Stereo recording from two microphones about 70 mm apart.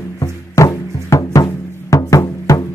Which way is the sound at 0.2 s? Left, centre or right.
Left.